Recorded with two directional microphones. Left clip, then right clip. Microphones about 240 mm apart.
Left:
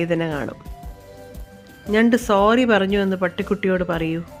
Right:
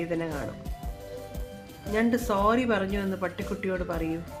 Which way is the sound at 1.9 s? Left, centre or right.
Left.